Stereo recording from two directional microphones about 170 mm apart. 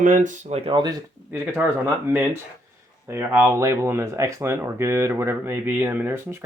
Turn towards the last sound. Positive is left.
turn(degrees=-15)  # may be behind; listen again after turning